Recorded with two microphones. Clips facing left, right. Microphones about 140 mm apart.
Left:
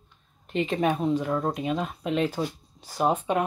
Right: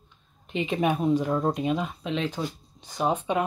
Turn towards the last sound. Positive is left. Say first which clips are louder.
# left 1 dB
turn(degrees=5)  # may be behind; listen again after turning